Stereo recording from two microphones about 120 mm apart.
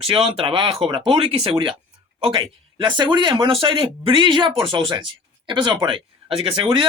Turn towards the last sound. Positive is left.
turn(degrees=-45)  # may be behind; listen again after turning